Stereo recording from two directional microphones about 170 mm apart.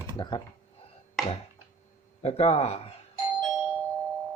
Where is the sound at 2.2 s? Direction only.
35° left (ahead or behind).